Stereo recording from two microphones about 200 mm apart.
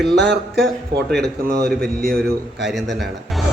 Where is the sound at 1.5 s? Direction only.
50° right (ahead or behind).